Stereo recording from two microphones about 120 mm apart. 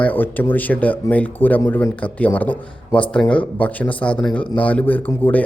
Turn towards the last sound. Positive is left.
turn(degrees=20)  # may be behind; listen again after turning